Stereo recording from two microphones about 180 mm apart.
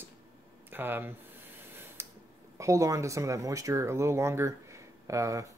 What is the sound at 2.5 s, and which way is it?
Speech, 15° right (ahead or behind).